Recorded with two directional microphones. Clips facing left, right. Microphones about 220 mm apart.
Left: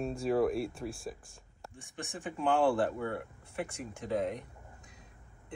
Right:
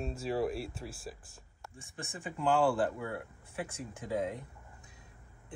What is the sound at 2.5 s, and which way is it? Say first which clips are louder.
Speech: left 1 dB; centre (ahead or behind).